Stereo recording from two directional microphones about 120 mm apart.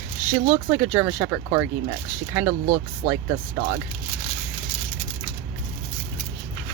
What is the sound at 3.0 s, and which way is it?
Speech, 75° right (ahead or behind).